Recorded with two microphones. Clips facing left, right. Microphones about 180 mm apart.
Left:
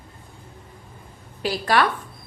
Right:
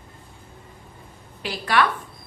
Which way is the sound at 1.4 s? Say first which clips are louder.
Left 2 dB; 40° left (ahead or behind).